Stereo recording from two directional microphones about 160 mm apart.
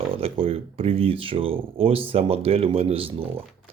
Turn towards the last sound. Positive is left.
turn(degrees=-35)  # may be behind; listen again after turning